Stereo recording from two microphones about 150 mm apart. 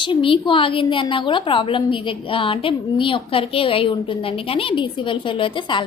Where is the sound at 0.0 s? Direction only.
35° left (ahead or behind).